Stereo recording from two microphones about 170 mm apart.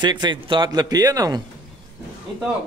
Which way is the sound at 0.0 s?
25° right (ahead or behind).